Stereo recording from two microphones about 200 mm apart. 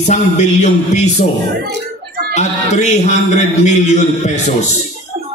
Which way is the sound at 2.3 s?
35° left (ahead or behind).